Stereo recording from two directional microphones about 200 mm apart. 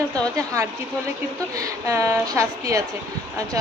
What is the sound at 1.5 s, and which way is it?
A woman's voice, 15° right (ahead or behind).